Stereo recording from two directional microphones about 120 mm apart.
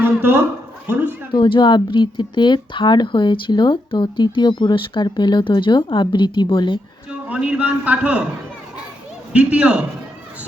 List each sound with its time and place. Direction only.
0.0 s a sound: 15° right (ahead or behind)
1.3 s speech: 45° left (ahead or behind)
7.3 s a man's voice: 10° right (ahead or behind)
9.3 s a man's voice: 10° right (ahead or behind)